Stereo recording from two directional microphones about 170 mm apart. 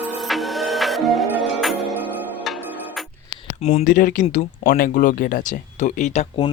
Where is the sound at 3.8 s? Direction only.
50° left (ahead or behind).